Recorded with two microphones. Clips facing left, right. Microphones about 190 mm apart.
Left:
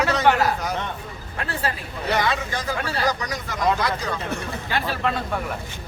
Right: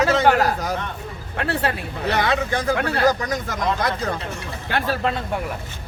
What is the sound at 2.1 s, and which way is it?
Speech, 60° right (ahead or behind).